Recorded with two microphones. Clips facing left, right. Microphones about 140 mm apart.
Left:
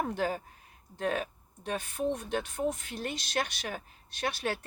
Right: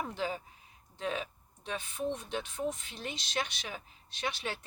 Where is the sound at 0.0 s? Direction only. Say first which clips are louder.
Left 4 dB; 50° left (ahead or behind).